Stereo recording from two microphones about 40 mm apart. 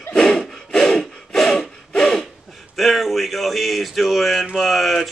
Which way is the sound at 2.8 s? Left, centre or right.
Centre.